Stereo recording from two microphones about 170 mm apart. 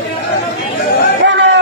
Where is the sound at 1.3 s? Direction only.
90° right.